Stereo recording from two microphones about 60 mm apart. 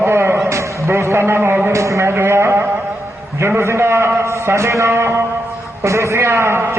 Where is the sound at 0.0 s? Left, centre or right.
Right.